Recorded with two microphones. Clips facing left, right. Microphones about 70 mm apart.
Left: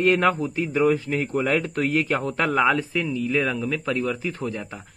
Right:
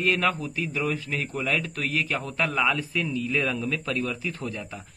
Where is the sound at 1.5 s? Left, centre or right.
Left.